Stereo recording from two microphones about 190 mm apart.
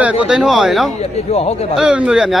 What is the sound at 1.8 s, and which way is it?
Speech, 5° right (ahead or behind).